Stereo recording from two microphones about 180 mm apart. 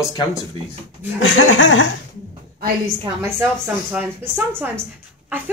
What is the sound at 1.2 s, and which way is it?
Speech, 90° left.